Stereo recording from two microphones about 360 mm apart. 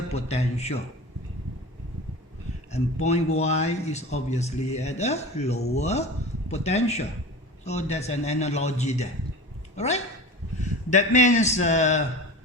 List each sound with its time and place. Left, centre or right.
0.1 s speech: centre
2.7 s a man's voice: centre